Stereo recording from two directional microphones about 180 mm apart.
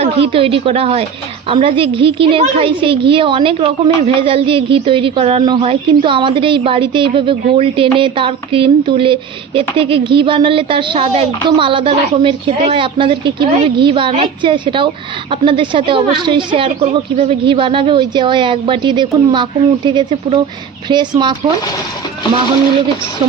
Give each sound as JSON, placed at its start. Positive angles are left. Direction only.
{"t": 0.0, "sound": "a woman's voice", "side_deg": -30}